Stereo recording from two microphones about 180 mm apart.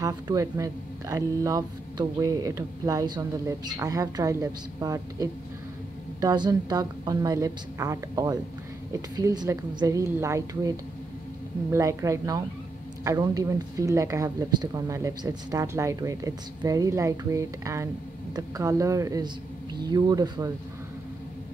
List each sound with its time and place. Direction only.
0.0 s speech: 15° right (ahead or behind)
11.7 s speech: 15° right (ahead or behind)